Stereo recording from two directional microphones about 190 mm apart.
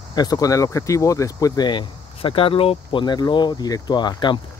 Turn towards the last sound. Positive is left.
turn(degrees=25)  # may be behind; listen again after turning